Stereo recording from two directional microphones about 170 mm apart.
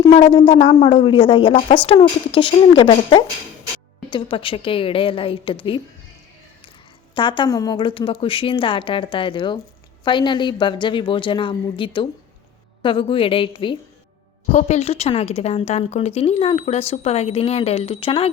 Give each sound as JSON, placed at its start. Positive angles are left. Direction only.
{"t": 0.3, "sound": "a woman's voice", "side_deg": 30}
{"t": 7.2, "sound": "a woman's voice", "side_deg": 30}
{"t": 14.5, "sound": "speech", "side_deg": 40}